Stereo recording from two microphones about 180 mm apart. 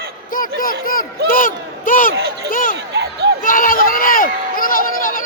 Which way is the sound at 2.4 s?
50° left (ahead or behind).